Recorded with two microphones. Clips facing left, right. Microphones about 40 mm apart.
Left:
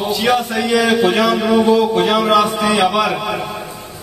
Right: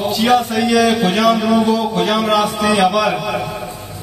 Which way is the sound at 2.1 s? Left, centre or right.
Centre.